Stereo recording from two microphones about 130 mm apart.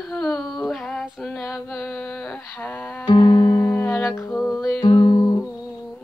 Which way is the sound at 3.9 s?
10° left (ahead or behind).